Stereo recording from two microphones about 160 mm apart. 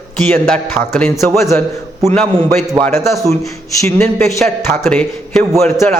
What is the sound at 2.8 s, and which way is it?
Speech, 15° left (ahead or behind).